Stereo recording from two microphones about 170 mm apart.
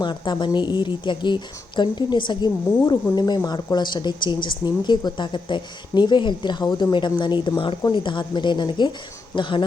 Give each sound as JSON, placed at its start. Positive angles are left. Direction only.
{"t": 0.0, "sound": "a woman's voice", "side_deg": 25}